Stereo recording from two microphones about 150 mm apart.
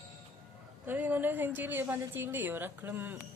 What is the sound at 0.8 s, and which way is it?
A woman's voice, 10° right (ahead or behind).